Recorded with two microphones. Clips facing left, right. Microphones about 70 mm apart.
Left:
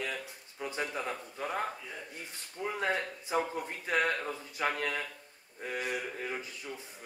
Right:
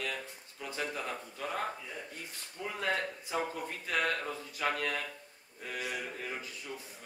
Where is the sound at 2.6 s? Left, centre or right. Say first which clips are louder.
Left 2 dB; left.